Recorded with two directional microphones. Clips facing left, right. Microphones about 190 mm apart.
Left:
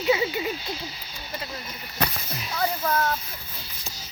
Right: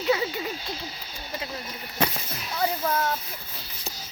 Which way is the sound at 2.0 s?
25° right (ahead or behind).